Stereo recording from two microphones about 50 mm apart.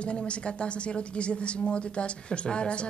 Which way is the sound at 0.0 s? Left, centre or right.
Left.